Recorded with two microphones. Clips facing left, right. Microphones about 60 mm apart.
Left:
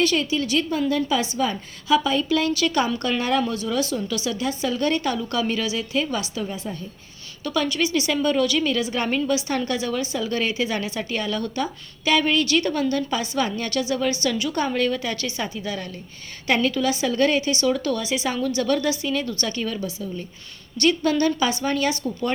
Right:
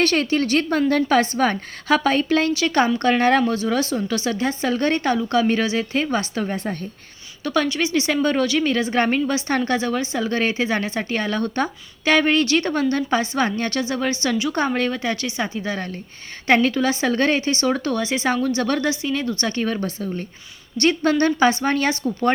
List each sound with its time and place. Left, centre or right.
0.0 s a woman's voice: right
7.4 s speech: right
20.7 s speech: right